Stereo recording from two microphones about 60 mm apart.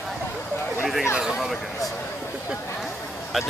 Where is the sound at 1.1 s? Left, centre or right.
Centre.